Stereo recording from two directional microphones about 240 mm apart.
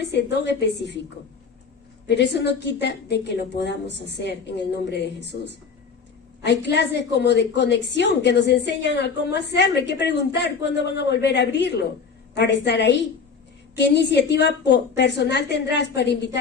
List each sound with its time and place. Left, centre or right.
0.0 s a woman's voice: left
2.0 s a woman's voice: left
6.4 s a woman's voice: left